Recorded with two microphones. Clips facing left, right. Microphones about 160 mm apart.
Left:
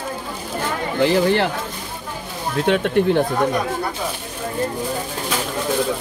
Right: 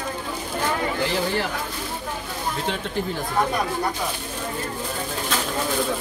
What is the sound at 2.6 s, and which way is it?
Speech, 65° left (ahead or behind).